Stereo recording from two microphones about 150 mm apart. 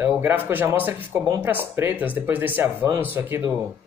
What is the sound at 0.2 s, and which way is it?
Speech, 15° right (ahead or behind).